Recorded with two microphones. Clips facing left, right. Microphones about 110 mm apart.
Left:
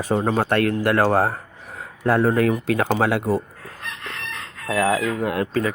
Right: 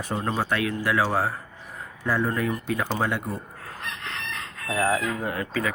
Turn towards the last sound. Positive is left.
turn(degrees=70)  # may be behind; listen again after turning